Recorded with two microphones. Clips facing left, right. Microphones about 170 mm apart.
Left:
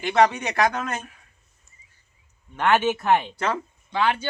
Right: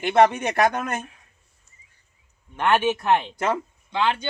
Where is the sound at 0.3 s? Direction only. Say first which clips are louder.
Right 2 dB; 50° right (ahead or behind).